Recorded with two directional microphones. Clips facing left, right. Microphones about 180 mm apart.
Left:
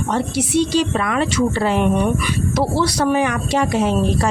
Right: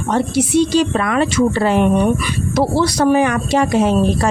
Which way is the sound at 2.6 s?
45° right (ahead or behind).